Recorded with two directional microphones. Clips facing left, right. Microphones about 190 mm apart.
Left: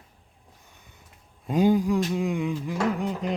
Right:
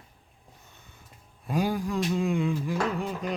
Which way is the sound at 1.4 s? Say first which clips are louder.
Left 7 dB; 20° left (ahead or behind).